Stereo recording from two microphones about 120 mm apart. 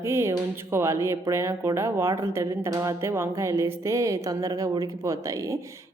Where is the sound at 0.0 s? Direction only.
20° right (ahead or behind).